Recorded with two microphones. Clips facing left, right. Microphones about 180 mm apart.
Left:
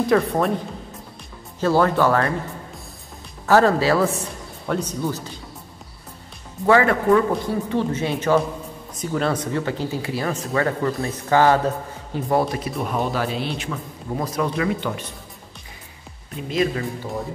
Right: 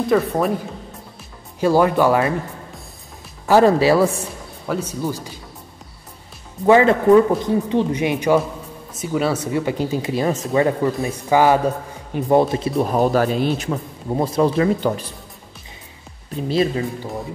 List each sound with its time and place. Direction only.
0.0 s speech: centre (ahead or behind)
1.6 s a man's voice: 15° right (ahead or behind)
3.4 s a man's voice: 15° right (ahead or behind)
6.6 s a man's voice: 20° right (ahead or behind); by 13.7 s 45° right (ahead or behind)
14.1 s speech: 30° right (ahead or behind)
16.3 s speech: 30° right (ahead or behind)